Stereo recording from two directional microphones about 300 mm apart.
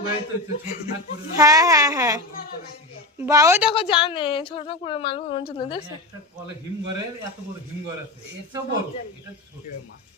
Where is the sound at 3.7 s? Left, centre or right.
Centre.